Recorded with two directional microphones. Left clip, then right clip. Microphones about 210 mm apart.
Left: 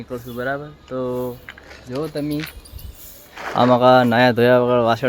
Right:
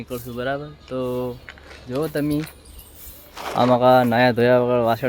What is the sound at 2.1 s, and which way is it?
Speech, 45° right (ahead or behind).